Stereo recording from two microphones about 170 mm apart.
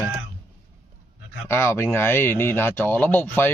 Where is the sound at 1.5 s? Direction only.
15° left (ahead or behind).